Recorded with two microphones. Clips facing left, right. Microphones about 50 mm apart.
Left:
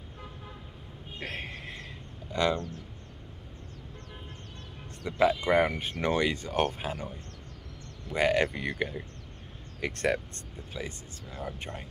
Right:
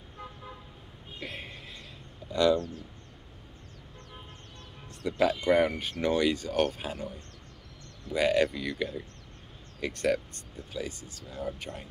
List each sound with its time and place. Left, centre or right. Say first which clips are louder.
1.2 s a sound: left 3 dB; left
2.3 s speech: right 3 dB; left
5.0 s speech: even; left
8.1 s speech: right 1 dB; left